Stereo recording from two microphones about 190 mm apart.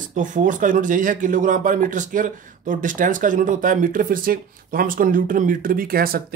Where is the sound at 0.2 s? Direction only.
40° right (ahead or behind).